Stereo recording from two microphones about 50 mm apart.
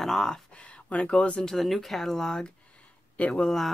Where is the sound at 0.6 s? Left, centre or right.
Left.